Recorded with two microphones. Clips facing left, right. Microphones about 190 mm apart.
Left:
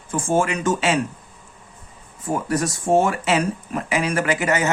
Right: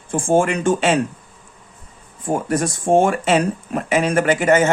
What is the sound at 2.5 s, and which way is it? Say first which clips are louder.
Speech: right 2 dB; 50° right (ahead or behind).